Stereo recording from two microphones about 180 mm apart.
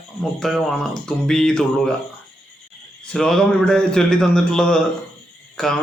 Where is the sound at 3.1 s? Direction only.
5° left (ahead or behind).